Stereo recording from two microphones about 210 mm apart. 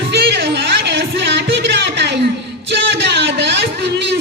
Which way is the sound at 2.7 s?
55° right (ahead or behind).